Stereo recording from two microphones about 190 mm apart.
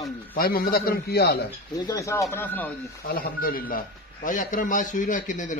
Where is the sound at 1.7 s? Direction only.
20° left (ahead or behind).